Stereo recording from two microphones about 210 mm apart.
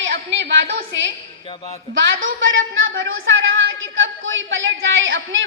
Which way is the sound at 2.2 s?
65° right (ahead or behind).